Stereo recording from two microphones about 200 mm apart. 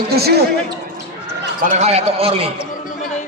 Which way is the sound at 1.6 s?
35° right (ahead or behind).